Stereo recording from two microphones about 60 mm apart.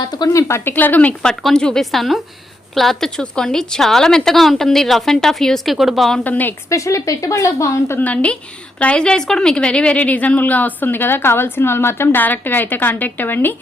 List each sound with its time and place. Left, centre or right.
0.3 s speech: left
0.6 s a woman's voice: left
1.2 s a woman's voice: centre
5.7 s a woman's voice: centre
6.2 s a woman's voice: left
6.7 s speech: left
7.9 s a woman's voice: left
12.2 s a woman's voice: left